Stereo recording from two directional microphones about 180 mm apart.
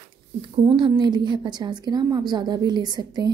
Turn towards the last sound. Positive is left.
turn(degrees=-20)  # may be behind; listen again after turning